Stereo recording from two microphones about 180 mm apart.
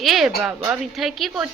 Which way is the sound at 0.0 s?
Centre (ahead or behind).